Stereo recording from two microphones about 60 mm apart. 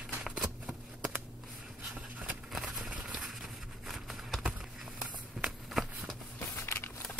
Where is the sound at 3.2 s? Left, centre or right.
Centre.